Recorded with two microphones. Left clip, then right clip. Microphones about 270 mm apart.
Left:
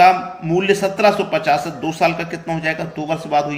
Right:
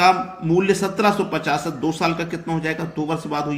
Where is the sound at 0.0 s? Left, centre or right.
Centre.